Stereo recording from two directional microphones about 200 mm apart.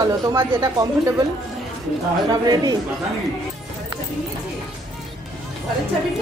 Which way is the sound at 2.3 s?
20° right (ahead or behind).